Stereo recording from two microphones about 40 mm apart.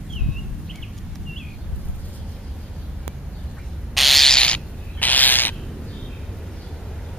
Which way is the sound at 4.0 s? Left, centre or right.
Centre.